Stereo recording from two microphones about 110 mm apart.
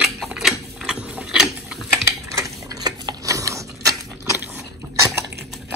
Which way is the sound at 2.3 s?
35° right (ahead or behind).